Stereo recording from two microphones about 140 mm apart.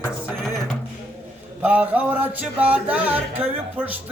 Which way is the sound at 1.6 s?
10° right (ahead or behind).